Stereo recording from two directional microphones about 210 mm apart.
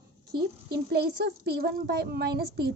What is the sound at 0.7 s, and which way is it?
A woman's voice, 50° right (ahead or behind).